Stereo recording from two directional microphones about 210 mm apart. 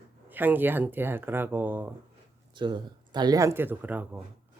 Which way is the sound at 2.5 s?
20° right (ahead or behind).